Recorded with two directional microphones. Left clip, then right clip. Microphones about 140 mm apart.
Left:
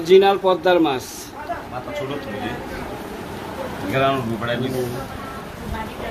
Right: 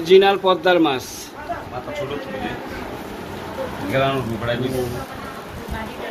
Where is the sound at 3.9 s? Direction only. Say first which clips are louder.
Left 1 dB; 35° right (ahead or behind).